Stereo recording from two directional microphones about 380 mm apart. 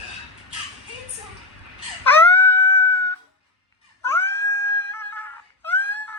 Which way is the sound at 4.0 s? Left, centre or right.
Centre.